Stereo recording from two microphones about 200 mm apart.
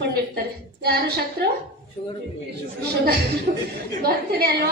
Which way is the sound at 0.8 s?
50° right (ahead or behind).